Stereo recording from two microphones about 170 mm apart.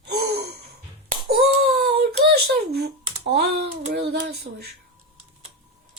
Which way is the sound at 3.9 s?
70° right (ahead or behind).